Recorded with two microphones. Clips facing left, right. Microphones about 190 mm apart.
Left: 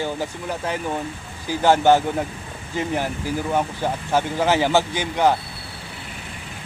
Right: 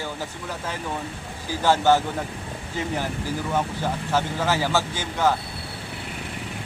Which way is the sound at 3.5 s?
15° left (ahead or behind).